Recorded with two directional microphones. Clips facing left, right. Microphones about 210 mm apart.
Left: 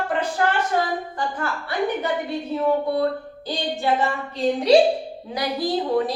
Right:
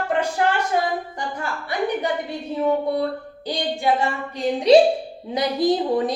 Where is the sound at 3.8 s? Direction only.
15° right (ahead or behind).